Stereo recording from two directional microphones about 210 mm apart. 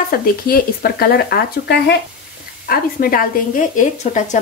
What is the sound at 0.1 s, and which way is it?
A woman's voice, 45° left (ahead or behind).